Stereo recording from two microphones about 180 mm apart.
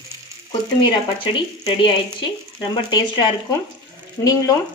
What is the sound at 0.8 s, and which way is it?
Speech, 25° left (ahead or behind).